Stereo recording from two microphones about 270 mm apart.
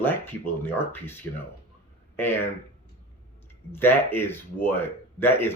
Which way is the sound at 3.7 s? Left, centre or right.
Centre.